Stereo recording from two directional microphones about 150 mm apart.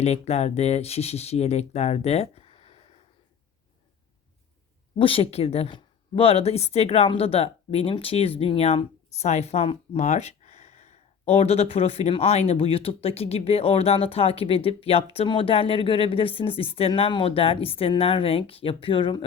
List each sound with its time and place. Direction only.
0.0 s speech: 45° left (ahead or behind)
4.9 s a woman's voice: 40° left (ahead or behind)